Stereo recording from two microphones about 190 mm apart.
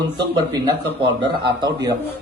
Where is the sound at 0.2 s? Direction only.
25° right (ahead or behind).